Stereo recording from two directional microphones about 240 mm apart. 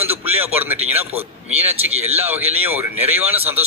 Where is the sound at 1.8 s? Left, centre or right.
Right.